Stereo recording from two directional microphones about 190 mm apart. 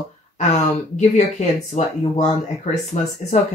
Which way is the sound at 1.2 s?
35° left (ahead or behind).